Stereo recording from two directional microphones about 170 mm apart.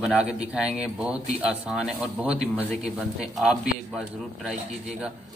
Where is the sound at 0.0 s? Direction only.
5° right (ahead or behind).